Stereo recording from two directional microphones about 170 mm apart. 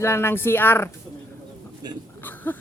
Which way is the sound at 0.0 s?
15° left (ahead or behind).